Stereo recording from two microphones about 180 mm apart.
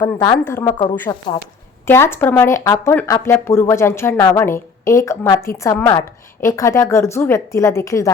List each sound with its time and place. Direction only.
0.0 s a woman's voice: 20° left (ahead or behind)